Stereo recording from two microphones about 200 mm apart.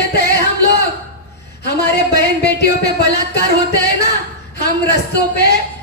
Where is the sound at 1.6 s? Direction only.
55° left (ahead or behind).